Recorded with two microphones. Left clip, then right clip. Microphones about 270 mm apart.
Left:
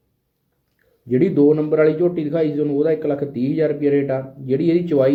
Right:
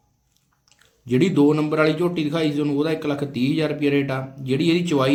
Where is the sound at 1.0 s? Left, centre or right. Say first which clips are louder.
Left 3 dB; centre.